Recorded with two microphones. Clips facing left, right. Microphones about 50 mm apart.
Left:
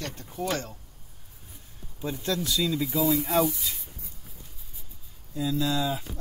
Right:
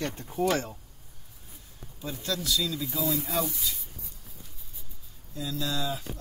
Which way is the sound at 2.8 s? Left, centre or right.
Centre.